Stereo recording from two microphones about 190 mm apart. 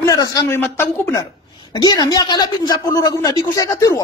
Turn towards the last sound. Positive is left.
turn(degrees=20)  # may be behind; listen again after turning